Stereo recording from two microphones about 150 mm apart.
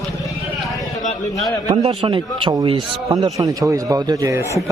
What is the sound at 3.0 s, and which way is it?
A man's voice, 20° right (ahead or behind).